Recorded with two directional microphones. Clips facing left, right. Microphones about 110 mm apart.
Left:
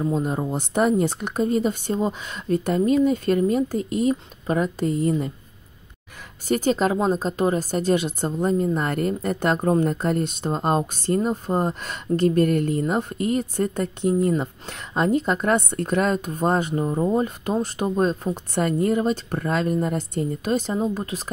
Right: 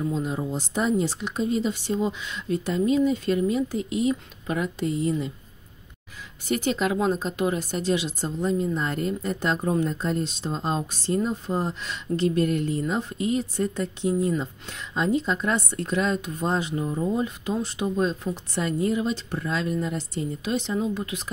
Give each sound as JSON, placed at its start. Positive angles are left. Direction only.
{"t": 0.0, "sound": "speech", "side_deg": 45}
{"t": 6.4, "sound": "speech", "side_deg": 40}